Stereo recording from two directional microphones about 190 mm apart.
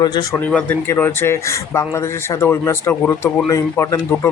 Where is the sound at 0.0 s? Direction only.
20° left (ahead or behind).